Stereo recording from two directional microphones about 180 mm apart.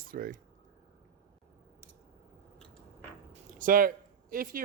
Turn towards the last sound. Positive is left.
turn(degrees=-50)  # may be behind; listen again after turning